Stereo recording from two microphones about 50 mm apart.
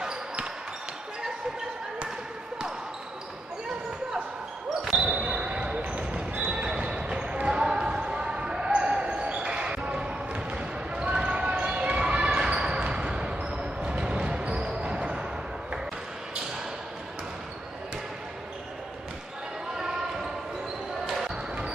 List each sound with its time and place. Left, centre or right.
0.0 s basketball bounce: centre
5.0 s basketball bounce: right